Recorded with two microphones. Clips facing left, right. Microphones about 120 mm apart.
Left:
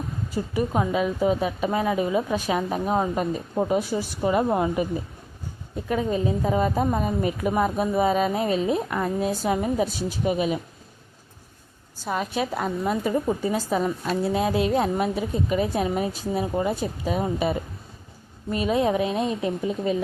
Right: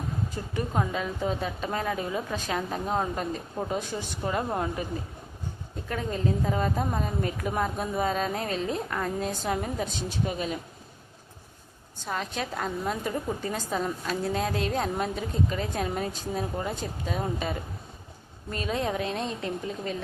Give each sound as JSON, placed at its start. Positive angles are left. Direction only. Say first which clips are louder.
{"t": 0.5, "sound": "a woman's voice", "louder": "left 5 dB", "side_deg": 10}
{"t": 5.9, "sound": "a woman's voice", "louder": "left 5 dB", "side_deg": 10}
{"t": 12.0, "sound": "a woman's voice", "louder": "left 6 dB", "side_deg": 10}